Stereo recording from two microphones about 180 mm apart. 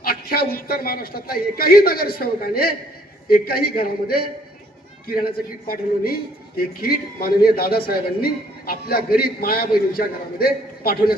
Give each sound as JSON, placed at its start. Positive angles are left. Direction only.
{"t": 0.0, "sound": "a man's voice", "side_deg": 55}